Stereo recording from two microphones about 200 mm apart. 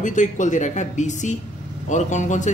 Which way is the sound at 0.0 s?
40° left (ahead or behind).